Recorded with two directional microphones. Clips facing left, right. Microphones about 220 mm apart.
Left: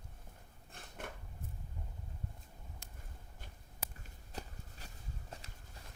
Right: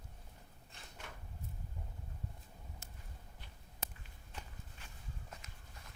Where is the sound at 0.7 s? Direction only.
55° left (ahead or behind).